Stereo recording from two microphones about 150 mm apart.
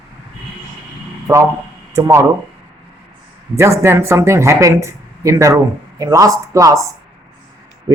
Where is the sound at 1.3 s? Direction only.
20° right (ahead or behind).